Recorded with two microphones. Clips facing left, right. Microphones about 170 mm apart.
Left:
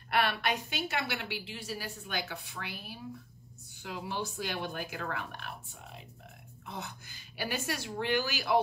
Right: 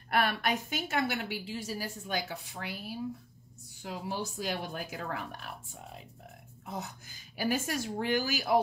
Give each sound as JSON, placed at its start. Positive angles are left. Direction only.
{"t": 0.1, "sound": "a woman's voice", "side_deg": -45}